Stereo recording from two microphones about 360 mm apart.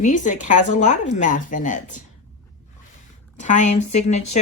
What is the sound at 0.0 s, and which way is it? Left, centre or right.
Speech, left.